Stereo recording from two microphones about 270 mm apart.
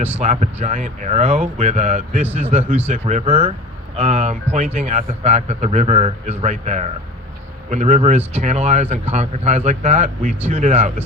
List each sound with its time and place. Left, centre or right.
0.2 s a man's voice: right